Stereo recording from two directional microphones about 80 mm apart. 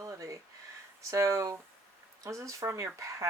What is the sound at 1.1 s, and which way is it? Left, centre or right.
Speech, right.